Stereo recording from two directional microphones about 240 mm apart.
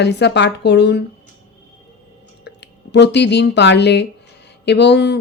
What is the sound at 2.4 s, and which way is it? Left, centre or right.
Speech, left.